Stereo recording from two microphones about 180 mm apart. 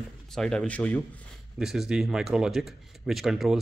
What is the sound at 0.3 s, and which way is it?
Speech, 5° left (ahead or behind).